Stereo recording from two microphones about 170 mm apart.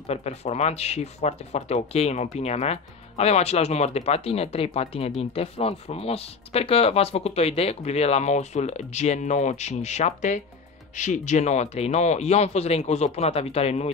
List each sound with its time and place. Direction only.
0.1 s speech: 40° left (ahead or behind)